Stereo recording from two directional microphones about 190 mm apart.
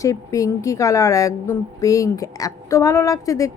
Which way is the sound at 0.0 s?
15° left (ahead or behind).